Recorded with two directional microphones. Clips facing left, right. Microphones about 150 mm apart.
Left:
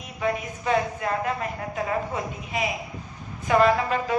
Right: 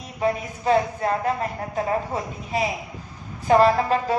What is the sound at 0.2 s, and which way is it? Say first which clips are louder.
A woman's voice: right 3 dB; 35° right (ahead or behind).